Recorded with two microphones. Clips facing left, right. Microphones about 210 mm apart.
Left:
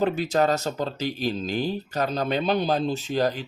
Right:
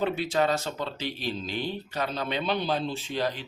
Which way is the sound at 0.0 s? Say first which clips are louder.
Left 4 dB; 40° left (ahead or behind).